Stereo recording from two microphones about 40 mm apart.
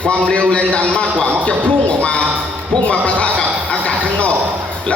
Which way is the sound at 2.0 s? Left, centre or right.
Left.